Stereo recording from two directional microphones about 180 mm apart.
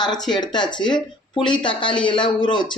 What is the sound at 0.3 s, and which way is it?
Speech, 25° left (ahead or behind).